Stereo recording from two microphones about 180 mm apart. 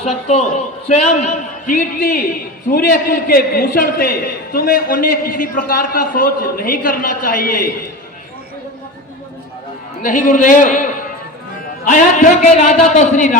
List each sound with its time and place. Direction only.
0.0 s a man's voice: 35° left (ahead or behind); by 7.7 s 55° left (ahead or behind)
10.0 s a man's voice: 45° left (ahead or behind)
11.9 s a man's voice: 45° left (ahead or behind)